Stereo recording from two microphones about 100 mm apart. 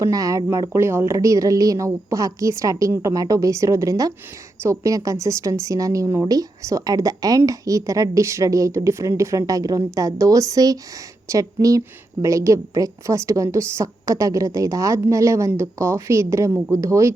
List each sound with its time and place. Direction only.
0.0 s speech: 35° right (ahead or behind)